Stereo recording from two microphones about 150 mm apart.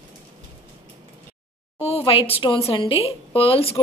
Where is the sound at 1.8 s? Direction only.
40° left (ahead or behind).